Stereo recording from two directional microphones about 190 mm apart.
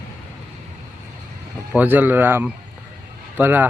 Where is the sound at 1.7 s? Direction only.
10° right (ahead or behind).